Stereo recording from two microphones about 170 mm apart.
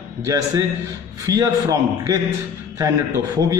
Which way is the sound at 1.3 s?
20° right (ahead or behind).